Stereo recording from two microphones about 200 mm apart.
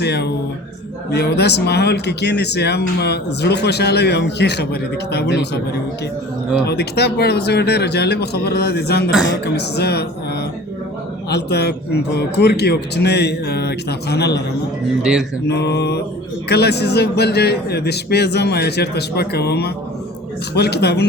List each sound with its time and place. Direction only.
0.0 s speech: 55° left (ahead or behind)
6.7 s speech: 55° left (ahead or behind)
11.3 s speech: 55° left (ahead or behind)
15.4 s speech: 55° left (ahead or behind)